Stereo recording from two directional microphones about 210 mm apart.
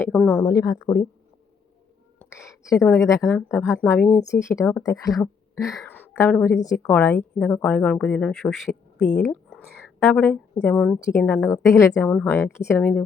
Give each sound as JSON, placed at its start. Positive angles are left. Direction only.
{"t": 0.0, "sound": "a woman's voice", "side_deg": 5}
{"t": 2.1, "sound": "a woman's voice", "side_deg": 10}
{"t": 5.6, "sound": "a woman's voice", "side_deg": 0}
{"t": 5.9, "sound": "a sound", "side_deg": 10}
{"t": 6.8, "sound": "a woman's voice", "side_deg": 5}